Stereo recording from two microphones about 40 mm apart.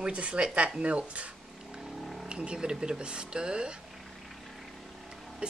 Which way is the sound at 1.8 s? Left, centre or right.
Centre.